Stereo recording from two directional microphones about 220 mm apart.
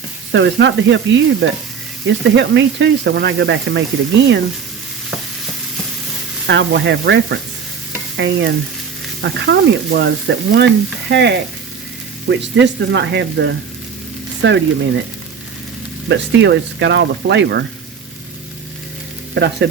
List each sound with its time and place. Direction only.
0.3 s speech: 55° right (ahead or behind)
6.5 s speech: 55° right (ahead or behind)
8.1 s stir: 55° right (ahead or behind)
9.2 s speech: 50° right (ahead or behind)
16.0 s speech: 55° right (ahead or behind)
19.3 s frying: 50° right (ahead or behind)